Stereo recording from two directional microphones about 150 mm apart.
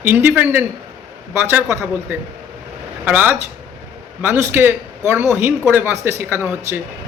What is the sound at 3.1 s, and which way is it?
A man's voice, 10° right (ahead or behind).